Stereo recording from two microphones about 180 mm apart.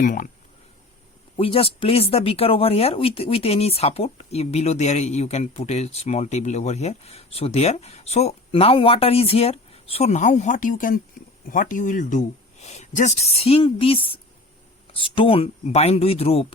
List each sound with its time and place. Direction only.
0.0 s speech: 45° left (ahead or behind)
1.4 s speech: 30° left (ahead or behind)